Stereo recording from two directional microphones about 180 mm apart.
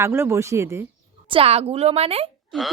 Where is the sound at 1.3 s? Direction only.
35° right (ahead or behind).